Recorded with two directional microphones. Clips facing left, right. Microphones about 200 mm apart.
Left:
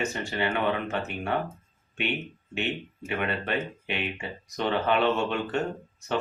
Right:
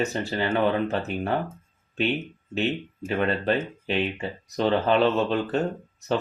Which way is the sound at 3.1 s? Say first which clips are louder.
Right 5 dB; 35° right (ahead or behind).